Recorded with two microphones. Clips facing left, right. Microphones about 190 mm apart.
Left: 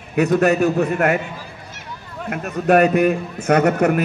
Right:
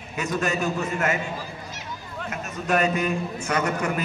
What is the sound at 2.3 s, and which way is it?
A man's voice, 65° left (ahead or behind).